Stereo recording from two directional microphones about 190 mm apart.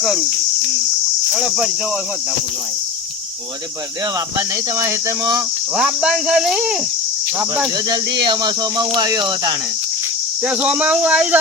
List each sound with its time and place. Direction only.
0.0 s speech: centre (ahead or behind)
1.3 s speech: 5° right (ahead or behind)
4.4 s speech: 15° right (ahead or behind)
5.7 s speech: 5° right (ahead or behind)
7.9 s speech: 20° right (ahead or behind)
10.4 s speech: 5° right (ahead or behind)